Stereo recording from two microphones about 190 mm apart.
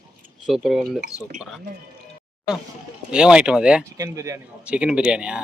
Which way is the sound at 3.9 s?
15° right (ahead or behind).